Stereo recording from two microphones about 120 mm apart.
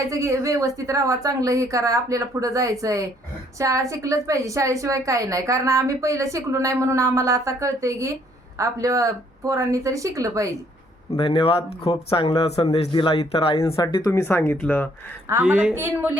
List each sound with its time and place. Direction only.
0.0 s a woman's voice: 25° right (ahead or behind)
11.1 s speech: 55° left (ahead or behind)
14.0 s speech: 20° left (ahead or behind)
15.3 s a woman's voice: 15° right (ahead or behind)